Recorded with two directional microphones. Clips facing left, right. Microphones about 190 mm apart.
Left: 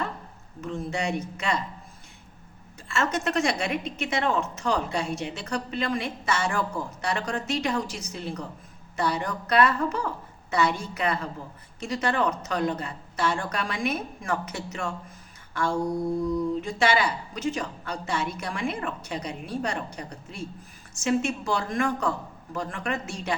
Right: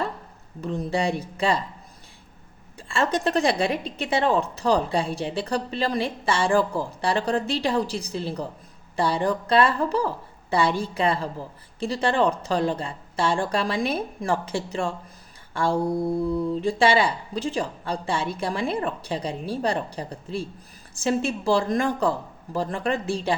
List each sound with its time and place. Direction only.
0.6 s a woman's voice: 35° right (ahead or behind)
2.7 s a woman's voice: 30° right (ahead or behind)